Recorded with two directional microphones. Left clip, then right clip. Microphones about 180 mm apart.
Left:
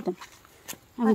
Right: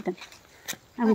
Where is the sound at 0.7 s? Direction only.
40° right (ahead or behind).